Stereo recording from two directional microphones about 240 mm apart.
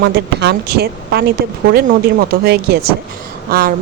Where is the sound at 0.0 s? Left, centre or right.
Right.